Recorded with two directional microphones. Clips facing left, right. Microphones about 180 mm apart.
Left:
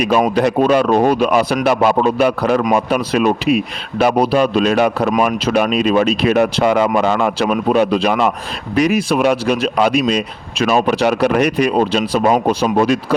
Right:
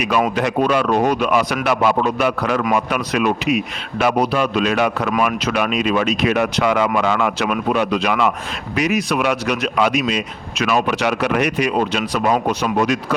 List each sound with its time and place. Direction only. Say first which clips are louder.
0.0 s speech: left 4 dB; 35° left (ahead or behind)